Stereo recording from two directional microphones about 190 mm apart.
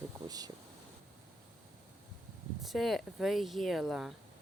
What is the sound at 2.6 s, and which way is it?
Speech, centre (ahead or behind).